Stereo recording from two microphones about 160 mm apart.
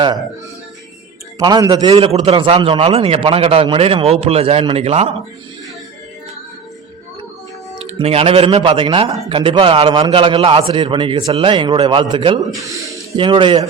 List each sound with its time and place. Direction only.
1.4 s a man's voice: 25° right (ahead or behind); by 5.1 s 40° right (ahead or behind)
7.9 s a man's voice: 40° right (ahead or behind)
12.6 s speech: 20° right (ahead or behind)
13.1 s a man's voice: 30° right (ahead or behind)